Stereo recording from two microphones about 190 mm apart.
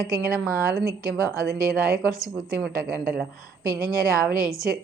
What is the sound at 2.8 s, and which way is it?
Speech, 5° right (ahead or behind).